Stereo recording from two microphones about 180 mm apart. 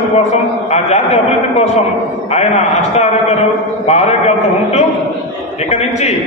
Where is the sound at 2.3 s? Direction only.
40° left (ahead or behind).